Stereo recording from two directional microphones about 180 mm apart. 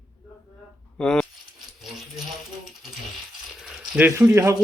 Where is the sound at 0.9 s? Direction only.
5° left (ahead or behind).